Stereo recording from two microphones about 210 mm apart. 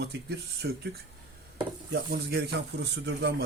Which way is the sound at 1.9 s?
50° right (ahead or behind).